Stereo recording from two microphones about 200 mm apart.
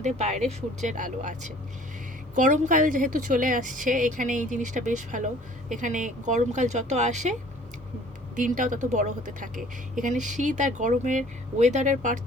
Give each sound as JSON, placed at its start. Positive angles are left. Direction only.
{"t": 0.0, "sound": "a woman's voice", "side_deg": -35}
{"t": 8.4, "sound": "a woman's voice", "side_deg": -40}